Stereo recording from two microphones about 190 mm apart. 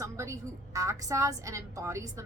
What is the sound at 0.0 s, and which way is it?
A woman's voice, 15° right (ahead or behind).